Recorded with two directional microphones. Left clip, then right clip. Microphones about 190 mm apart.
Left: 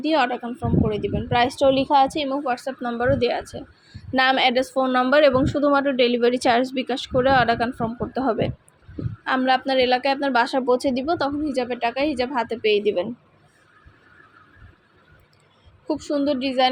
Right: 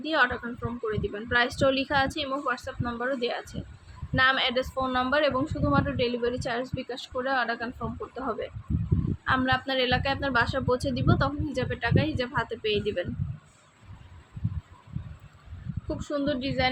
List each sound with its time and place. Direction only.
0.0 s a woman's voice: 25° left (ahead or behind)
15.9 s a woman's voice: 30° left (ahead or behind)